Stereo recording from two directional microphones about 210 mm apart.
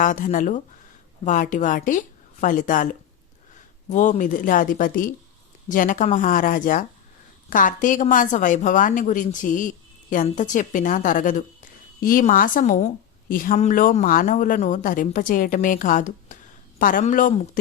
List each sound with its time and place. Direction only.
0.0 s a woman's voice: 40° left (ahead or behind)